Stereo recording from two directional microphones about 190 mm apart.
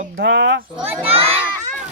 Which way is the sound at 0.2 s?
65° right (ahead or behind).